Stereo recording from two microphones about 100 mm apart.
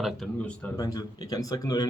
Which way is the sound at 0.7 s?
40° left (ahead or behind).